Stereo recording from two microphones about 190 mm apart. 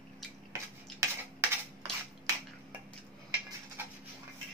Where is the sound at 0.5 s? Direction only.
15° right (ahead or behind).